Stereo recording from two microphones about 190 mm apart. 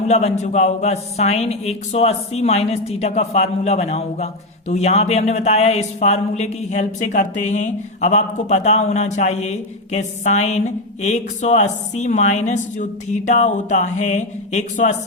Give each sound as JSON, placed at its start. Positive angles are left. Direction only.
{"t": 0.1, "sound": "speech", "side_deg": 35}